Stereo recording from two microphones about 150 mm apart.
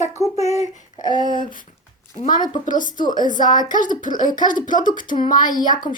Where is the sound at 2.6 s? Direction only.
60° left (ahead or behind).